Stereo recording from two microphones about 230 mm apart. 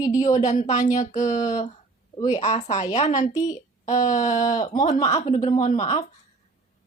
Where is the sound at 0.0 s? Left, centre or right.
Centre.